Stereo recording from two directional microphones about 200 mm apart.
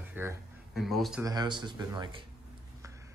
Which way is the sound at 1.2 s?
20° right (ahead or behind).